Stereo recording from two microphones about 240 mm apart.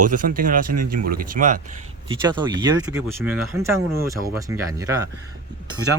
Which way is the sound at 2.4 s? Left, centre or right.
Centre.